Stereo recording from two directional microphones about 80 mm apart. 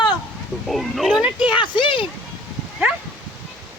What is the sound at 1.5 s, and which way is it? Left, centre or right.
Speech, left.